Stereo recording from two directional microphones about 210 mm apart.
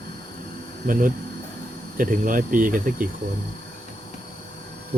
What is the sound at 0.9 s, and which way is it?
Speech, 40° right (ahead or behind).